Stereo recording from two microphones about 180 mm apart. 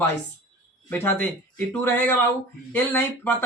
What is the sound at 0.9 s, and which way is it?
A man's voice, 10° left (ahead or behind).